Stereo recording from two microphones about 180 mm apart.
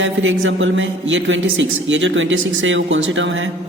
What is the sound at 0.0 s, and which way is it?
A man's voice, 90° right.